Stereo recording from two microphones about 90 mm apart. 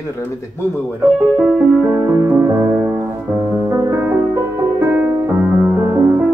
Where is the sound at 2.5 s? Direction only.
25° right (ahead or behind).